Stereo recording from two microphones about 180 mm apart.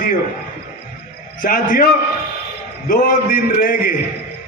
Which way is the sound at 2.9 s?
50° left (ahead or behind).